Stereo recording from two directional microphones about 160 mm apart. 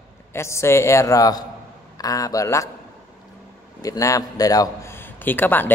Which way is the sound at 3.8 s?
20° left (ahead or behind).